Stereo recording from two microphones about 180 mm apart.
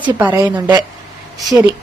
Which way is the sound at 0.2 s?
10° right (ahead or behind).